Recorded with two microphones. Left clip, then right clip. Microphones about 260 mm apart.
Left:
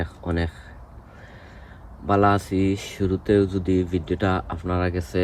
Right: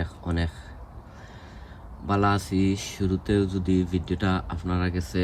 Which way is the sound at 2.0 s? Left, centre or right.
Centre.